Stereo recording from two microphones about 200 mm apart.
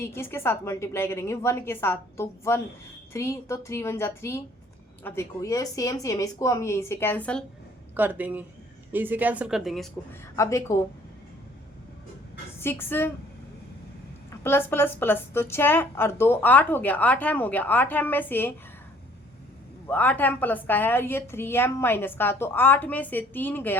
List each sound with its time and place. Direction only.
0.0 s a woman's voice: 10° left (ahead or behind)
7.9 s speech: 10° right (ahead or behind)
10.3 s a woman's voice: 15° left (ahead or behind)
12.5 s a woman's voice: 10° left (ahead or behind)
14.3 s a woman's voice: 10° left (ahead or behind)
19.9 s a woman's voice: 10° left (ahead or behind)